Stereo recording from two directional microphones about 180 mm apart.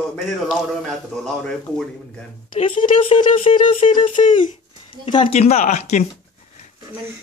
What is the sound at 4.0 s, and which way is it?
Speech, 30° left (ahead or behind).